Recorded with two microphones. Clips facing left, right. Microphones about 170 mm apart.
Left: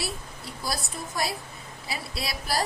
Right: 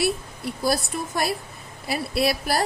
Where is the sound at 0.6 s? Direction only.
60° right (ahead or behind).